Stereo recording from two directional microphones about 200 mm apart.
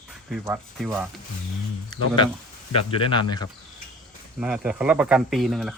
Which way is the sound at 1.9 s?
20° left (ahead or behind).